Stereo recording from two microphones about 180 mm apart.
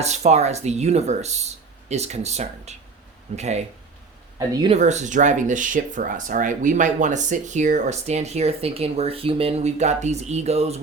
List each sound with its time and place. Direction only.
0.0 s speech: 40° right (ahead or behind)
4.7 s speech: 40° right (ahead or behind)